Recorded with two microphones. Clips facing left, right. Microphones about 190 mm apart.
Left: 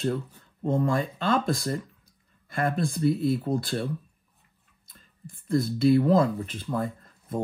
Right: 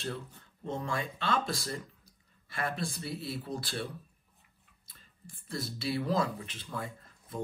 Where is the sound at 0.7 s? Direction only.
55° left (ahead or behind).